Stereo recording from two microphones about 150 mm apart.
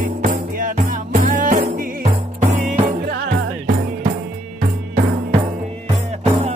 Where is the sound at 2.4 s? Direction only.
55° right (ahead or behind).